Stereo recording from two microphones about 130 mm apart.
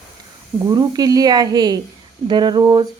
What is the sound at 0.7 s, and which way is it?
A woman's voice, 30° right (ahead or behind).